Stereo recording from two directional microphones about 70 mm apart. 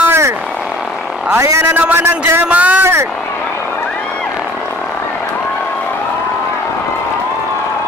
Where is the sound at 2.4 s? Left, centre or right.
Right.